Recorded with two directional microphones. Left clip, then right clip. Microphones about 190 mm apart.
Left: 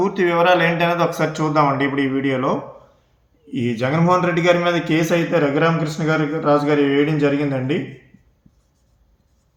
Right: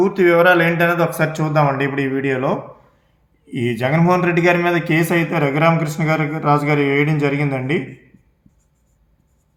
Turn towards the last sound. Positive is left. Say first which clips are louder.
# even
turn(degrees=-35)  # may be behind; listen again after turning